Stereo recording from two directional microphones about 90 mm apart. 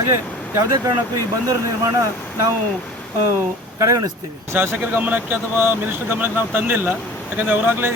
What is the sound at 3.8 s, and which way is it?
Speech, 40° right (ahead or behind).